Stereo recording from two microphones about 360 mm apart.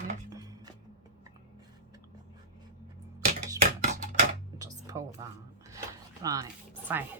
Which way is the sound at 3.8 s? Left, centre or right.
Right.